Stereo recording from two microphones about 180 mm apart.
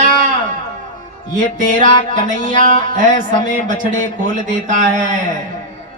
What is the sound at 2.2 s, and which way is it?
Speech, 45° right (ahead or behind).